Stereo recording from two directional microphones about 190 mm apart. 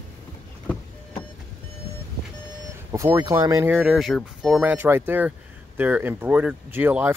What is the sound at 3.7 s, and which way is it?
Speech, centre (ahead or behind).